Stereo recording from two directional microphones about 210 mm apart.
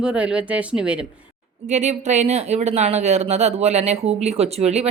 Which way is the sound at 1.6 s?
35° right (ahead or behind).